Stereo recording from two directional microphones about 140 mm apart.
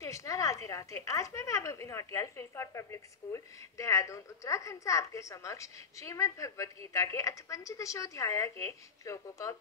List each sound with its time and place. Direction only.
0.0 s a woman's voice: 20° left (ahead or behind)